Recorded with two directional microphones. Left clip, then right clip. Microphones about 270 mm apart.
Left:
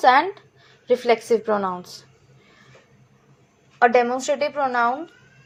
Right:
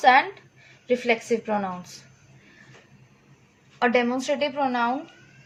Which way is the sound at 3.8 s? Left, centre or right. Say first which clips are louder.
Left 5 dB; centre.